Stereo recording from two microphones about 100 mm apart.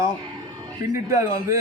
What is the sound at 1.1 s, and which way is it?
Speech, 30° right (ahead or behind).